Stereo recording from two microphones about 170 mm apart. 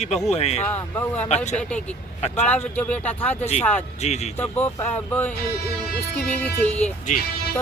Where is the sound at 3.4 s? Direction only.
40° left (ahead or behind).